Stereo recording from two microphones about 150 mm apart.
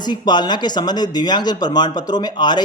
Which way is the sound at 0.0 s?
30° left (ahead or behind).